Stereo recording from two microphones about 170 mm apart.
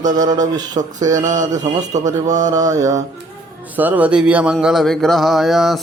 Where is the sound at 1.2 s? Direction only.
45° right (ahead or behind).